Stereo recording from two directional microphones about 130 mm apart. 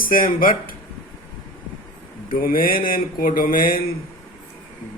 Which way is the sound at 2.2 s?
90° left.